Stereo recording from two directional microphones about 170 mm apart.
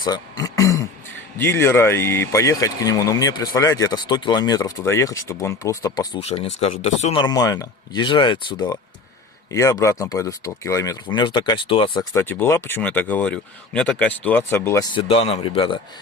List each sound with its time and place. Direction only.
0.0 s speech: 25° left (ahead or behind)
6.1 s speech: 35° left (ahead or behind)
7.2 s speech: 25° left (ahead or behind)
12.1 s speech: 10° left (ahead or behind)
14.9 s speech: 35° left (ahead or behind)